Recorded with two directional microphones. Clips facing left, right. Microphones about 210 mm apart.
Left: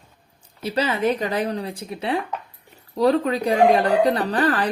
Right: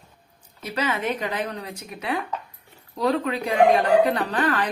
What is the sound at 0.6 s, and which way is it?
Speech, 30° left (ahead or behind).